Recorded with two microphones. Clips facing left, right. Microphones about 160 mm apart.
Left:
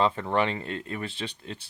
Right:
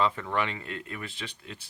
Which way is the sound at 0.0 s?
30° left (ahead or behind).